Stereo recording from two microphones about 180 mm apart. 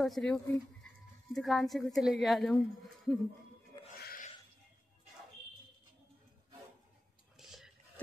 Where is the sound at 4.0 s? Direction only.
55° left (ahead or behind).